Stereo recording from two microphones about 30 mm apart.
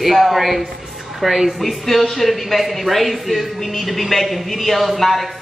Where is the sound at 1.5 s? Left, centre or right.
Centre.